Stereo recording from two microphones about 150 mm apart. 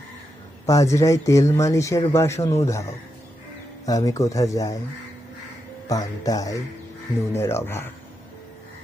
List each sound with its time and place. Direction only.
0.6 s speech: 20° left (ahead or behind)
3.8 s speech: 25° left (ahead or behind)
5.9 s speech: 25° left (ahead or behind)